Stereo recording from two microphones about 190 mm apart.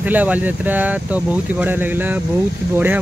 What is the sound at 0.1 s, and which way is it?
Speech, 10° right (ahead or behind).